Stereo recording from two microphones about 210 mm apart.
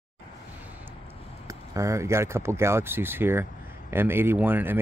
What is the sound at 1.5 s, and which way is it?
Speech, 15° right (ahead or behind).